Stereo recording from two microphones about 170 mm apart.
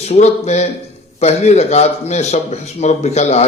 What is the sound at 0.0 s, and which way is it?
A man's voice, 40° left (ahead or behind).